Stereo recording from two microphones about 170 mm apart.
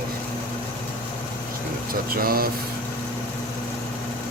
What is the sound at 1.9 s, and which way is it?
Speech, 60° right (ahead or behind).